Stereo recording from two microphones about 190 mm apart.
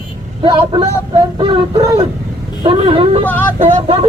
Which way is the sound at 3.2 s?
10° left (ahead or behind).